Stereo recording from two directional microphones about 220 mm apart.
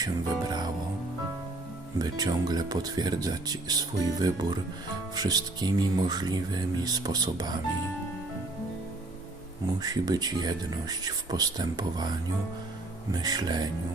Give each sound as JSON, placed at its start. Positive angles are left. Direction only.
{"t": 0.0, "sound": "music", "side_deg": -20}
{"t": 2.0, "sound": "speech", "side_deg": -15}
{"t": 9.8, "sound": "speech", "side_deg": -15}